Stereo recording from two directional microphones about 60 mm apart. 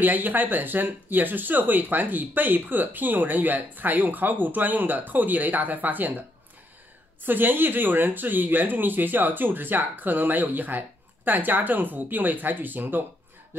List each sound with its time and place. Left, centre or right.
0.0 s speech: right
7.2 s speech: right